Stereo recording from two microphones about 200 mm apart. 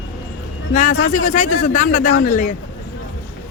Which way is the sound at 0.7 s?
35° left (ahead or behind).